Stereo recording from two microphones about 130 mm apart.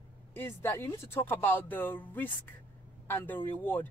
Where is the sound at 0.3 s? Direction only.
20° left (ahead or behind).